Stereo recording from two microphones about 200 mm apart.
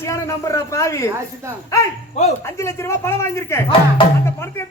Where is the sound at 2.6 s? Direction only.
15° left (ahead or behind).